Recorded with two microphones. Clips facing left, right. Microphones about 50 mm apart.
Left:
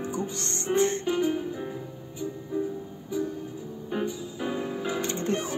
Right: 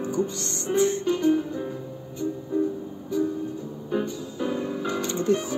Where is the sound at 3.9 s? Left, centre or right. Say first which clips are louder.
Right 3 dB; centre.